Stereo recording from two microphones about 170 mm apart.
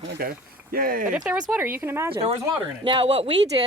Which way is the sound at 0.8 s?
55° right (ahead or behind).